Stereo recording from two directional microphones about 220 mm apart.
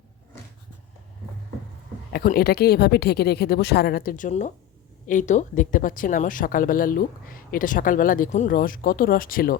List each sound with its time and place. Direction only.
2.1 s speech: 45° left (ahead or behind)